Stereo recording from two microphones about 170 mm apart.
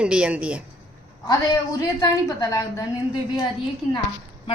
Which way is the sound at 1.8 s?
20° left (ahead or behind).